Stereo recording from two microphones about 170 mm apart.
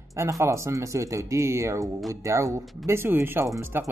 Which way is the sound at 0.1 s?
15° right (ahead or behind).